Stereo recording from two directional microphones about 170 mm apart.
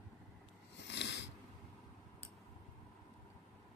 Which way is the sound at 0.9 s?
90° left.